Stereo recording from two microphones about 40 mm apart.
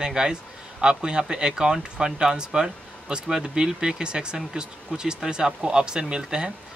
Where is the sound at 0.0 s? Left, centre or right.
Centre.